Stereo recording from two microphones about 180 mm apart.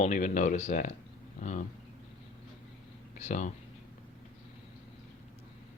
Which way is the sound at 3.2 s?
40° left (ahead or behind).